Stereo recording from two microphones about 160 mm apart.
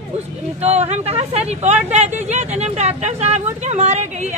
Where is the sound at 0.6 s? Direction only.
45° right (ahead or behind).